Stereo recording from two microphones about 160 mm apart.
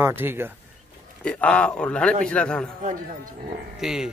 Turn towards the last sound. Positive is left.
turn(degrees=-5)  # may be behind; listen again after turning